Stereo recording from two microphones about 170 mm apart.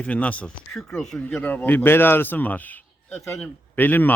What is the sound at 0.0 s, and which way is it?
Speech, 10° left (ahead or behind).